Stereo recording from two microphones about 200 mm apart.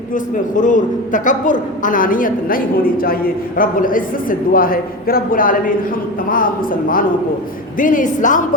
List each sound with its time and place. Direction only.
0.1 s a man's voice: 40° left (ahead or behind)